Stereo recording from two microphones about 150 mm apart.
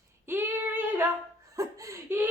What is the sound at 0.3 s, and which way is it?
Female singing, 15° right (ahead or behind).